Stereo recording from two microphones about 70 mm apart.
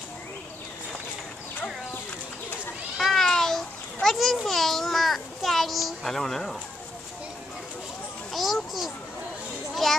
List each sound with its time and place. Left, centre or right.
3.0 s a sound: centre
8.3 s children playing: centre
9.8 s a child's voice: centre